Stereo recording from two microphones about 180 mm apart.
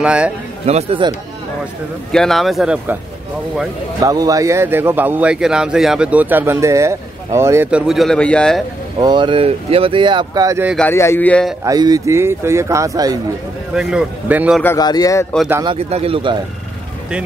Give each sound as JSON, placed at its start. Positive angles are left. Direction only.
{"t": 0.0, "sound": "speech", "side_deg": -5}
{"t": 0.7, "sound": "speech", "side_deg": -35}
{"t": 2.1, "sound": "speech", "side_deg": 0}
{"t": 4.0, "sound": "a man's voice", "side_deg": -20}
{"t": 9.0, "sound": "speech", "side_deg": -25}
{"t": 10.9, "sound": "speech", "side_deg": 15}
{"t": 11.6, "sound": "a man's voice", "side_deg": -20}
{"t": 13.7, "sound": "speech", "side_deg": -5}
{"t": 14.6, "sound": "speech", "side_deg": 15}
{"t": 15.6, "sound": "speech", "side_deg": -30}